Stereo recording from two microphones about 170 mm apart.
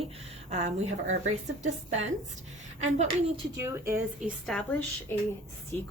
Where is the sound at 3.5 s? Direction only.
15° right (ahead or behind).